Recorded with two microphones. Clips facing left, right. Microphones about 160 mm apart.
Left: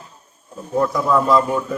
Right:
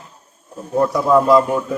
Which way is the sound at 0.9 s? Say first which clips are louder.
Right 5 dB; 15° right (ahead or behind).